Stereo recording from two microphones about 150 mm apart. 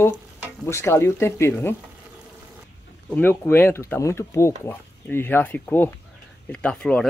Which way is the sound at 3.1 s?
15° left (ahead or behind).